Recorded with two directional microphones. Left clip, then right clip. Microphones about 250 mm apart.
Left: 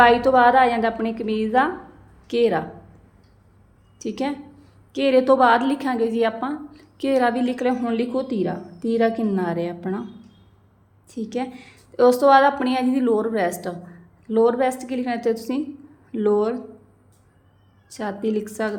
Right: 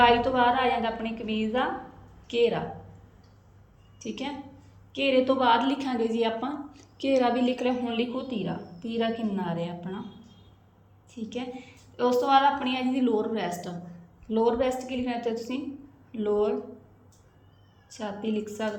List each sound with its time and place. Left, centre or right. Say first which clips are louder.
0.0 s a woman's voice: left 7 dB; centre
3.9 s a woman's voice: left 8 dB; centre
11.1 s a woman's voice: left 7 dB; centre
17.8 s a woman's voice: left 7 dB; centre